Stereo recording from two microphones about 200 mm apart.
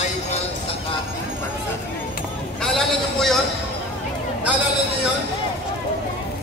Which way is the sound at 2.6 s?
Centre (ahead or behind).